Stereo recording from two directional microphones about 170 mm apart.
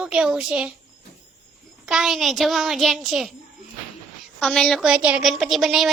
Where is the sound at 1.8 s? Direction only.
5° right (ahead or behind).